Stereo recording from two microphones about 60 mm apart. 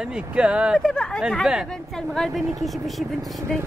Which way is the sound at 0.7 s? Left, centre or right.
Centre.